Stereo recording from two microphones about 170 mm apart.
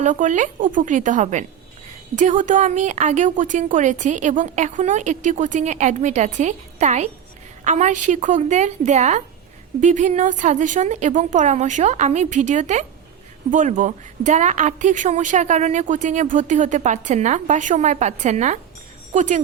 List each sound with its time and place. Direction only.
0.0 s speech: 50° right (ahead or behind)